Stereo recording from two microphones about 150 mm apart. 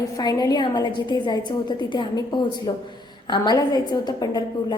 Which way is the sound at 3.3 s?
30° left (ahead or behind).